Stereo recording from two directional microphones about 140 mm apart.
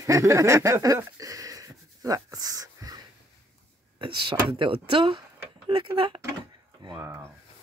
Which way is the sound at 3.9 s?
35° right (ahead or behind).